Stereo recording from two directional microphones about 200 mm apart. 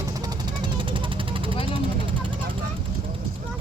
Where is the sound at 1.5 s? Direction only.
25° left (ahead or behind).